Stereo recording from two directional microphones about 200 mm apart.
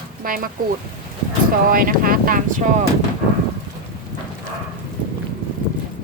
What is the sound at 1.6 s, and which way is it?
A woman's voice, 45° right (ahead or behind).